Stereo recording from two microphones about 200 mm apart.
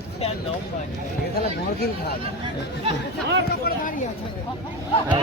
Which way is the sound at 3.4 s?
50° left (ahead or behind).